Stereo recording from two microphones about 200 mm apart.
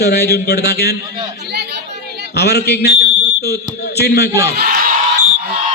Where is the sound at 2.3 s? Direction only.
55° left (ahead or behind).